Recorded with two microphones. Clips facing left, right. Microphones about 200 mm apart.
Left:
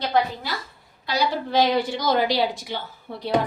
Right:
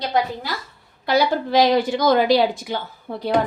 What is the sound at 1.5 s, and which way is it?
Speech, 90° right.